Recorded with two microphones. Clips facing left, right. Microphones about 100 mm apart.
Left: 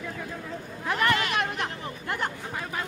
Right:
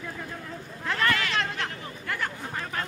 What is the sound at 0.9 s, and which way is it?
Chatter, 20° left (ahead or behind).